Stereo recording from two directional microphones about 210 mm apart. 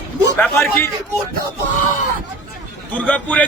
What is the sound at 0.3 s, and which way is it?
Speech, 10° left (ahead or behind).